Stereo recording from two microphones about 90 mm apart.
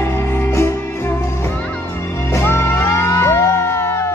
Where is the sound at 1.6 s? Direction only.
20° left (ahead or behind).